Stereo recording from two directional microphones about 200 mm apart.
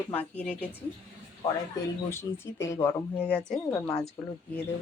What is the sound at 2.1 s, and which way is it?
Speech, 15° left (ahead or behind).